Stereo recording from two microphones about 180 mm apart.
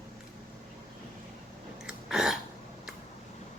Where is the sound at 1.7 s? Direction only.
5° right (ahead or behind).